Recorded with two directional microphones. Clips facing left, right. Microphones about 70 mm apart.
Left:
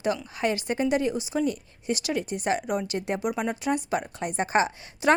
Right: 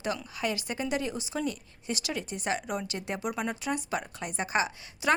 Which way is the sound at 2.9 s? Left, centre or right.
Left.